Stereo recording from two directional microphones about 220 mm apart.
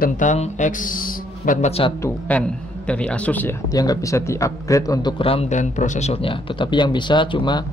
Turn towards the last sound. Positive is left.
turn(degrees=20)  # may be behind; listen again after turning